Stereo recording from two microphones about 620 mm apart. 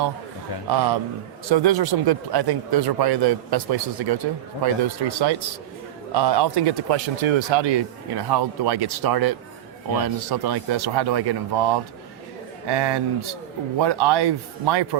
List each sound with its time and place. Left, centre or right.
0.7 s a man's voice: right